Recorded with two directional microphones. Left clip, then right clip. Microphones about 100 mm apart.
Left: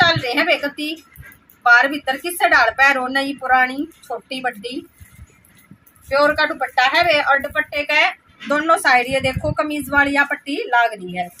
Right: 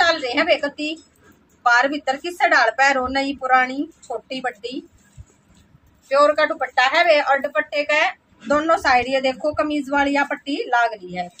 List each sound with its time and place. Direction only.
0.0 s a sound: 20° right (ahead or behind)
1.6 s a woman's voice: 15° right (ahead or behind)
6.0 s a woman's voice: 30° right (ahead or behind); by 11.2 s 10° right (ahead or behind)